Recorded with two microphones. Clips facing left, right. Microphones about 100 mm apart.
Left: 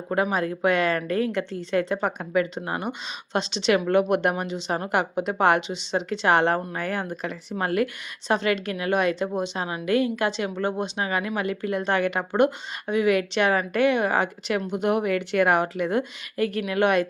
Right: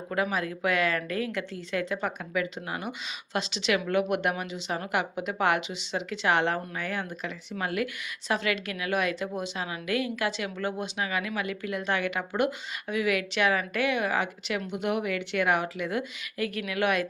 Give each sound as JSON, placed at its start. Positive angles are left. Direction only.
{"t": 0.1, "sound": "a woman's voice", "side_deg": 35}